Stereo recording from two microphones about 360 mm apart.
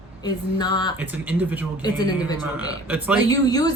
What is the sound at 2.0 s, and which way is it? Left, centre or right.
Speech, centre.